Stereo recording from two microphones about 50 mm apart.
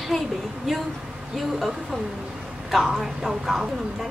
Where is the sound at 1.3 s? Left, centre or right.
Centre.